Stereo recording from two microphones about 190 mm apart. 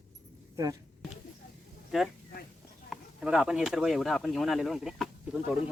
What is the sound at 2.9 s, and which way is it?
Speech, 5° right (ahead or behind).